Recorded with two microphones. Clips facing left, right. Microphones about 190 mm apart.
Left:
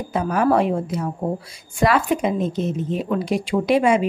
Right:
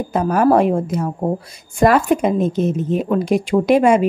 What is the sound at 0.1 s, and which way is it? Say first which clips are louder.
A woman's voice: right 4 dB; 45° right (ahead or behind).